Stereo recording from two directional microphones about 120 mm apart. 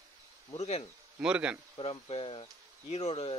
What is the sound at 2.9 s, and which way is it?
Speech, 60° left (ahead or behind).